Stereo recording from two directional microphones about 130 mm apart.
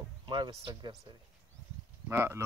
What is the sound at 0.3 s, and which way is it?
Speech, 35° right (ahead or behind).